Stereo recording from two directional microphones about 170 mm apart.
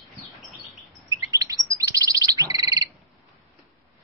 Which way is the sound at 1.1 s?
20° right (ahead or behind).